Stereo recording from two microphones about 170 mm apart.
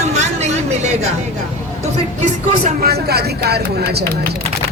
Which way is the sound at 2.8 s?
70° right (ahead or behind).